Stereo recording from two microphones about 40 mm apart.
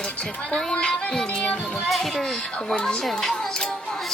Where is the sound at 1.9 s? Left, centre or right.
Centre.